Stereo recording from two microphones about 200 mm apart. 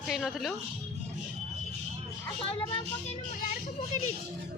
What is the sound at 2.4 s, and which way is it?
Speech, 25° left (ahead or behind).